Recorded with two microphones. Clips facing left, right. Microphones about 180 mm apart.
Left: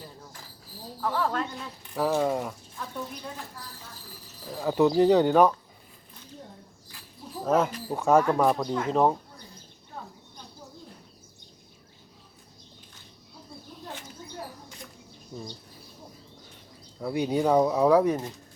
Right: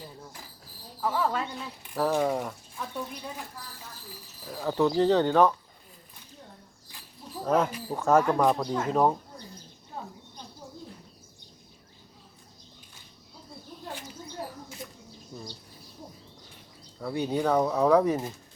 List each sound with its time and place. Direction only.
1.0 s speech: 5° right (ahead or behind)
4.5 s speech: 10° left (ahead or behind)
7.3 s a sound: 5° left (ahead or behind)
7.9 s speech: 10° left (ahead or behind)
10.0 s a sound: 25° right (ahead or behind)
15.3 s speech: 5° right (ahead or behind)
17.0 s speech: 15° left (ahead or behind); by 18.3 s 5° right (ahead or behind)